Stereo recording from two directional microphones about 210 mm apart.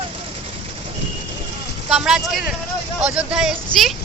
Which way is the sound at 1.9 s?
Centre (ahead or behind).